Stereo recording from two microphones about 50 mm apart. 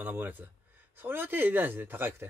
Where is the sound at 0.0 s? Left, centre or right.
Right.